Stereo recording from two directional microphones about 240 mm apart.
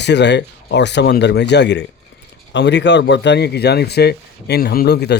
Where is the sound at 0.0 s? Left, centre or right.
Left.